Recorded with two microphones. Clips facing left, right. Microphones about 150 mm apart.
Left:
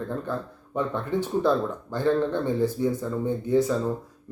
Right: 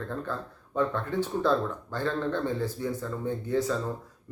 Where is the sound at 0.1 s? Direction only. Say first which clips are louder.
Left 4 dB; 15° left (ahead or behind).